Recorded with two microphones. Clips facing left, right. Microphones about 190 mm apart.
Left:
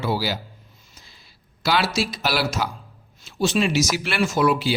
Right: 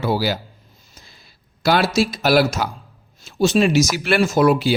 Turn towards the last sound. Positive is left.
turn(degrees=-45)  # may be behind; listen again after turning